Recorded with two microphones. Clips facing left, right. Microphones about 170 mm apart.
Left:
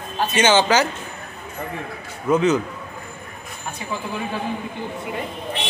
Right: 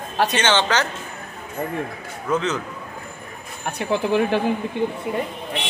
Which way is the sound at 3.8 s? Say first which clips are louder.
Right 9 dB; 70° right (ahead or behind).